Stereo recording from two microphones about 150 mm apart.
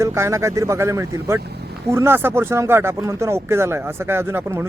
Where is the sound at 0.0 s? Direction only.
20° right (ahead or behind).